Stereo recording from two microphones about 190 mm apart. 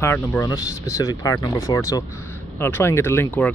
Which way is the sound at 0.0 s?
10° left (ahead or behind).